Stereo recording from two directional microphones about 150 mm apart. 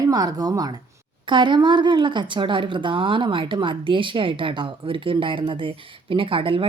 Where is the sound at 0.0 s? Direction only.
25° right (ahead or behind).